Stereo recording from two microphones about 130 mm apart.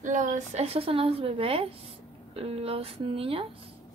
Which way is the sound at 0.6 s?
45° right (ahead or behind).